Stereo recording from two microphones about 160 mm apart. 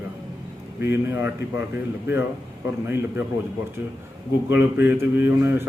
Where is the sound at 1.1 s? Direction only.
15° right (ahead or behind).